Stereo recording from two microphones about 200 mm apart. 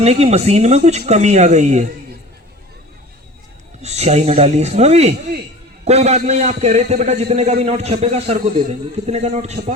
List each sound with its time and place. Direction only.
0.0 s a man's voice: 30° right (ahead or behind)
3.8 s a man's voice: 35° right (ahead or behind)